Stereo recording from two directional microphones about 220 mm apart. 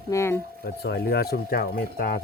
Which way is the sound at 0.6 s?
45° left (ahead or behind).